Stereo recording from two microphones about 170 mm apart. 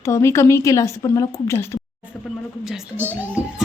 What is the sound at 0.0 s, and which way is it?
A woman's voice, 15° left (ahead or behind).